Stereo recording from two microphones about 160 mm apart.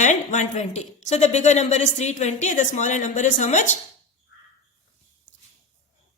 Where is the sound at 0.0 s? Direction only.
50° left (ahead or behind).